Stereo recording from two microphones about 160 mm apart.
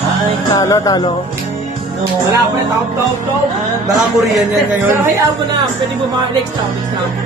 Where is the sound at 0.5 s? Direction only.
20° left (ahead or behind).